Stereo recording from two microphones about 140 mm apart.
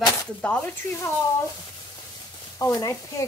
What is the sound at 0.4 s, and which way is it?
Speech, 10° left (ahead or behind).